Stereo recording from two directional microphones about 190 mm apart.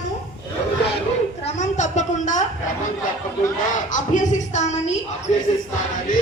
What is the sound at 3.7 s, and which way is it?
Music, 40° left (ahead or behind).